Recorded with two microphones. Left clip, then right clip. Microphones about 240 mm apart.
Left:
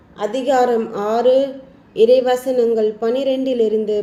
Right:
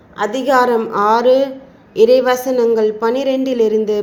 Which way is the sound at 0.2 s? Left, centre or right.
Centre.